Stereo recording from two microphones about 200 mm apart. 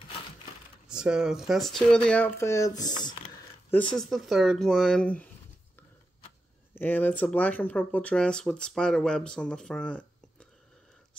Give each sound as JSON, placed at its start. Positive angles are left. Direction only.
{"t": 0.8, "sound": "speech", "side_deg": -5}
{"t": 3.7, "sound": "speech", "side_deg": 5}
{"t": 6.7, "sound": "speech", "side_deg": 10}